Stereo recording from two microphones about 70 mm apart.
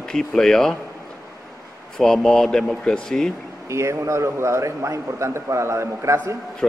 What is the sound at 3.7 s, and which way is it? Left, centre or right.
A man's voice, right.